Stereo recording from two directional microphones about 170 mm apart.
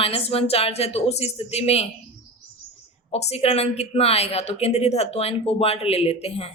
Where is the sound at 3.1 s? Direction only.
35° left (ahead or behind).